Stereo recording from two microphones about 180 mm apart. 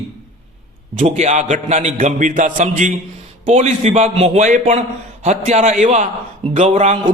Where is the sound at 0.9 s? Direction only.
40° right (ahead or behind).